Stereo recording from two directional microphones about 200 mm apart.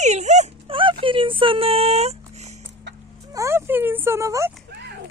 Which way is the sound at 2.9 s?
60° right (ahead or behind).